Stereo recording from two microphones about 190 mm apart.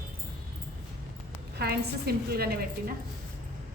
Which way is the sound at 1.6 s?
55° right (ahead or behind).